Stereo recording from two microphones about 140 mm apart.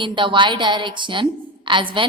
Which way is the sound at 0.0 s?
35° right (ahead or behind).